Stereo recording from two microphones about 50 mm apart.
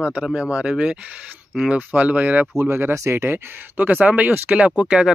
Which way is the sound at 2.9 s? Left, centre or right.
Right.